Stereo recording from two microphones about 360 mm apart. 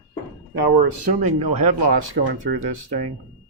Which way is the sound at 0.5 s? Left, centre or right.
Right.